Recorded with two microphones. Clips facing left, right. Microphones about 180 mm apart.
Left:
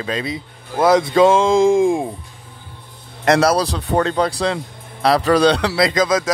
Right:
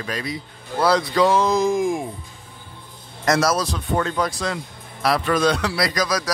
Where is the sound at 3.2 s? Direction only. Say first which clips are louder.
Left 5 dB; 60° left (ahead or behind).